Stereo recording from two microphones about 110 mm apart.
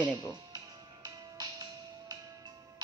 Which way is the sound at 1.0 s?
35° right (ahead or behind).